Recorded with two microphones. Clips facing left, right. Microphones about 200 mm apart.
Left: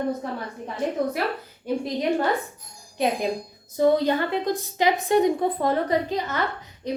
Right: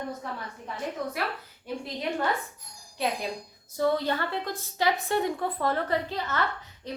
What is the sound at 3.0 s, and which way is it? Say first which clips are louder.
A woman's voice: left 6 dB; 20° left (ahead or behind).